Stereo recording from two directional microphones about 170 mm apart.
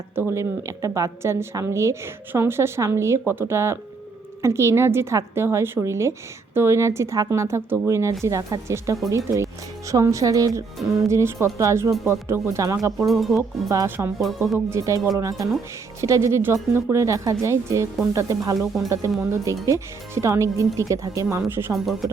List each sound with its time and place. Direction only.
0.2 s a woman's voice: 15° right (ahead or behind)
13.1 s speech: centre (ahead or behind)
13.3 s a woman's voice: 20° right (ahead or behind)
14.2 s speech: centre (ahead or behind)
14.7 s a woman's voice: 20° right (ahead or behind)
18.6 s speech: centre (ahead or behind)
19.2 s a woman's voice: 20° right (ahead or behind)
21.7 s speech: centre (ahead or behind)